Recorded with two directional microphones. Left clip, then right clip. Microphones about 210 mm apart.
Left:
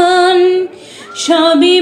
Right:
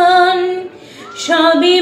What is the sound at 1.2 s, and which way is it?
Music, 40° left (ahead or behind).